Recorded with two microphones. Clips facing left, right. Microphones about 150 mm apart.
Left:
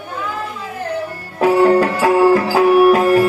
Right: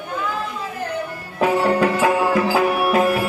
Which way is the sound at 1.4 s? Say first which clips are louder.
Left 5 dB; 35° left (ahead or behind).